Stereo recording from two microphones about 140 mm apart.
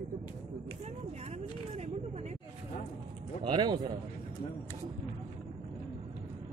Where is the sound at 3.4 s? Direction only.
35° right (ahead or behind).